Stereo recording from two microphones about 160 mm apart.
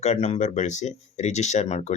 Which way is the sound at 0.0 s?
45° left (ahead or behind).